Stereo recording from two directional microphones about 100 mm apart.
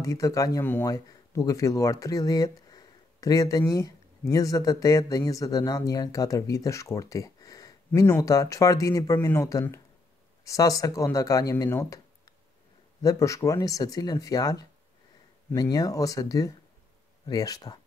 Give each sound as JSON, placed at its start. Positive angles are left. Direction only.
{"t": 0.0, "sound": "speech", "side_deg": 35}
{"t": 13.0, "sound": "speech", "side_deg": 35}